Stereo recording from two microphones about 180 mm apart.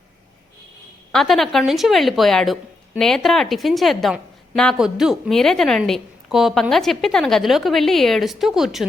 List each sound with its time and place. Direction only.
1.1 s a woman's voice: centre (ahead or behind)